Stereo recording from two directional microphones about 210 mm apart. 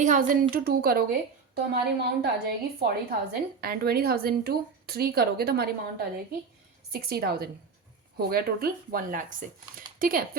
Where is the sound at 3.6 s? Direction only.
45° right (ahead or behind).